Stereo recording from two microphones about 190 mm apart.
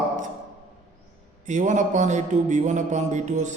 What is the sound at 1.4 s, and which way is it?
A man's voice, 40° right (ahead or behind).